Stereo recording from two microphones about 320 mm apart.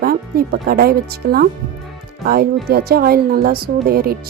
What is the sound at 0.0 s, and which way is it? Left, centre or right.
Speech, right.